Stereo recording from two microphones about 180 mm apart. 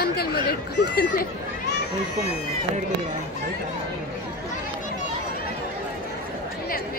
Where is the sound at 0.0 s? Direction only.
60° left (ahead or behind).